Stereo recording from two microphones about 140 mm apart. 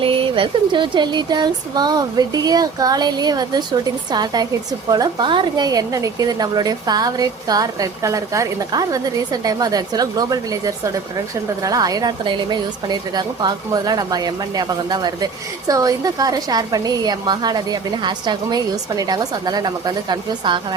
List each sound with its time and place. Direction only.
0.0 s a woman's voice: 40° right (ahead or behind)